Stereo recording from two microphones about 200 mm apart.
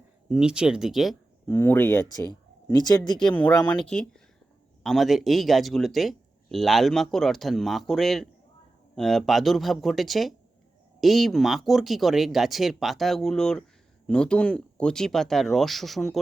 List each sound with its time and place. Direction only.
0.3 s speech: 5° right (ahead or behind)
1.5 s speech: 10° left (ahead or behind)
3.2 s speech: 5° left (ahead or behind)